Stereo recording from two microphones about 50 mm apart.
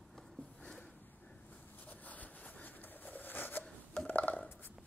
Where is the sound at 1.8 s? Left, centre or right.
Left.